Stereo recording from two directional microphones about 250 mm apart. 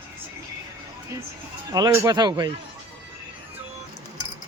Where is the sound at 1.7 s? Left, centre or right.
Centre.